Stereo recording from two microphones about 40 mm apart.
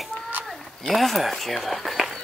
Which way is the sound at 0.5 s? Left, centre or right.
Centre.